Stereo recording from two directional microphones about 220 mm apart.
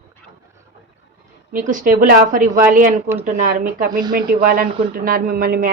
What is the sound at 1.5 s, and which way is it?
Speech, 35° right (ahead or behind).